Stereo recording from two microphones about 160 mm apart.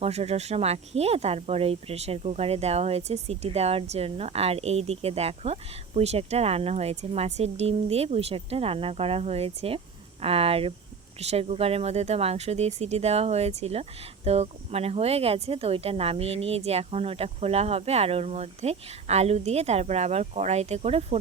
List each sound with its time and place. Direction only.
0.0 s speech: 40° right (ahead or behind)